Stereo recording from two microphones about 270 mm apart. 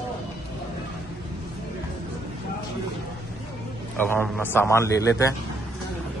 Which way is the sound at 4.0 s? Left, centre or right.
Centre.